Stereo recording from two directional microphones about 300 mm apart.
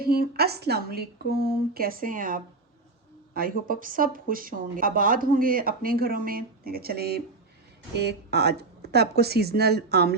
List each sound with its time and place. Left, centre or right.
0.0 s a woman's voice: right